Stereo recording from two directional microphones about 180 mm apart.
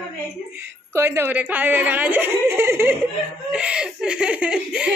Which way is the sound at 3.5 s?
5° right (ahead or behind).